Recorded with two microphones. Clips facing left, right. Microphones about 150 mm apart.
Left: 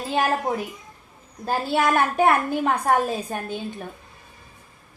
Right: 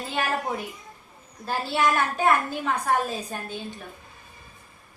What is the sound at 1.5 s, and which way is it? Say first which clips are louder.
A woman's voice: left 3 dB; 50° left (ahead or behind).